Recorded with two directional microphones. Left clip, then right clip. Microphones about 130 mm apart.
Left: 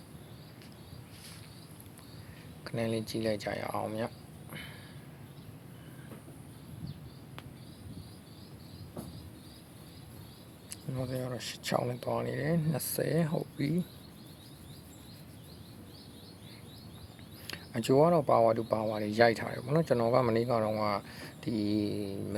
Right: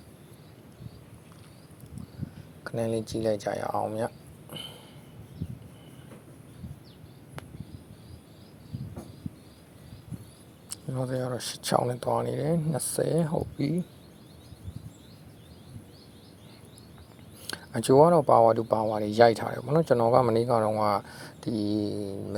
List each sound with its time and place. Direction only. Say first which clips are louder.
2.7 s speech: right 4 dB; 20° right (ahead or behind)
10.7 s speech: right 6 dB; 30° right (ahead or behind)
17.4 s speech: right 5 dB; 35° right (ahead or behind)
21.9 s mantra: right 3 dB; 15° right (ahead or behind)